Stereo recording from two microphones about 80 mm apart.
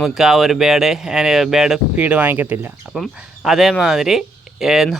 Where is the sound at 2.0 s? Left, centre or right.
Centre.